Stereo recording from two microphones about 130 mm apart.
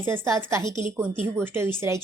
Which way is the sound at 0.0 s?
20° right (ahead or behind).